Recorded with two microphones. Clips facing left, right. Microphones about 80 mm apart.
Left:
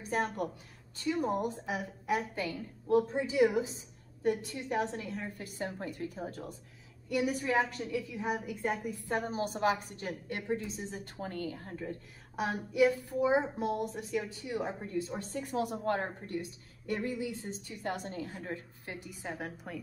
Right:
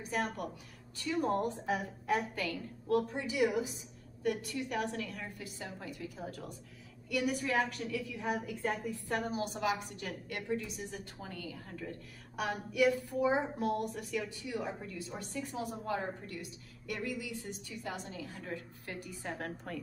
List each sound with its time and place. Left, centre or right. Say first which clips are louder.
0.1 s a woman's voice: left 3 dB; left
1.1 s a woman's voice: right 1 dB; centre
5.4 s a woman's voice: left 6 dB; left
6.2 s a woman's voice: left 2 dB; left
9.3 s a woman's voice: left 6 dB; left
11.1 s a woman's voice: left 6 dB; left
15.4 s a woman's voice: left 9 dB; left
16.3 s a woman's voice: left 6 dB; left
17.8 s a woman's voice: left 6 dB; left
18.4 s a woman's voice: left 2 dB; left; by 19.8 s centre